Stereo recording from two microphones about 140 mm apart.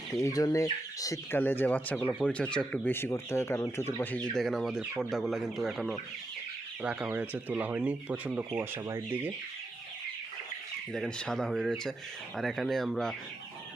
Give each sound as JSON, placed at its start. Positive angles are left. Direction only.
{"t": 0.1, "sound": "speech", "side_deg": 20}
{"t": 6.8, "sound": "speech", "side_deg": -10}
{"t": 10.9, "sound": "speech", "side_deg": 5}